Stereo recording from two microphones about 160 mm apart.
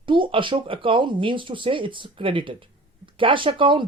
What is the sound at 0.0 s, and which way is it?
Speech, 30° right (ahead or behind).